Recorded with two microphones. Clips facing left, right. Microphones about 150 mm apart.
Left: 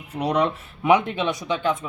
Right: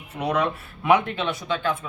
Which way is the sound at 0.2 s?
35° left (ahead or behind).